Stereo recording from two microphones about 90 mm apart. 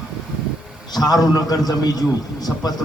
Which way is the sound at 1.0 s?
45° left (ahead or behind).